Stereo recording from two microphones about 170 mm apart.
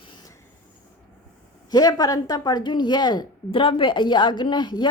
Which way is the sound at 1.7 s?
20° left (ahead or behind).